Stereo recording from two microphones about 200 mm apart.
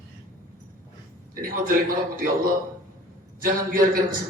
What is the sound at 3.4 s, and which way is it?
Speech, 45° right (ahead or behind).